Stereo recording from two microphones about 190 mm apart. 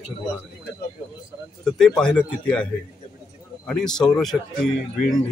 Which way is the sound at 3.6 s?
5° left (ahead or behind).